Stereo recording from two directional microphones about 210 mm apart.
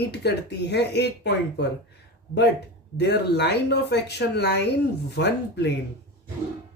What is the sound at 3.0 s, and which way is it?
Speech, 55° left (ahead or behind).